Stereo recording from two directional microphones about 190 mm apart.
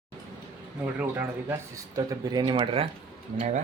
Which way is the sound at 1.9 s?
20° right (ahead or behind).